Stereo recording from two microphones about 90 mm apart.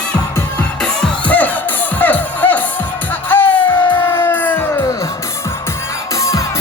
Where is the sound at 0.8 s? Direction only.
10° left (ahead or behind).